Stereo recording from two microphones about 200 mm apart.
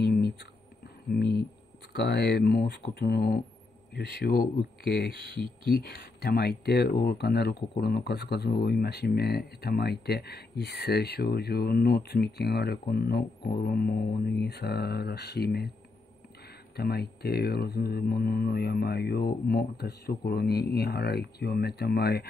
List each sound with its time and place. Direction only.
1.1 s speech: 50° left (ahead or behind)
16.7 s speech: 50° left (ahead or behind)